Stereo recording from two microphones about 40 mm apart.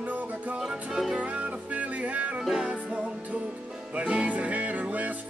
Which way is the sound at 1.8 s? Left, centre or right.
Right.